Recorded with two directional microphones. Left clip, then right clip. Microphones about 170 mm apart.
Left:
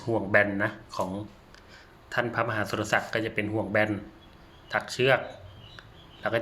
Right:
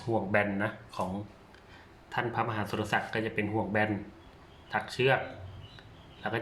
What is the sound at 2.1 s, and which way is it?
Speech, 20° left (ahead or behind).